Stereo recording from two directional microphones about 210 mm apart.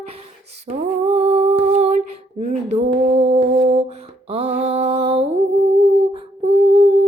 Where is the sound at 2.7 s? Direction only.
30° right (ahead or behind).